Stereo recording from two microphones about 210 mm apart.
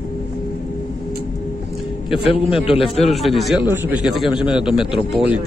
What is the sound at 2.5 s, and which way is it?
Speech, 25° left (ahead or behind).